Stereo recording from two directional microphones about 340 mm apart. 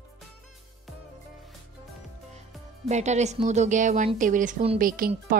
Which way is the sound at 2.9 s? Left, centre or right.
Centre.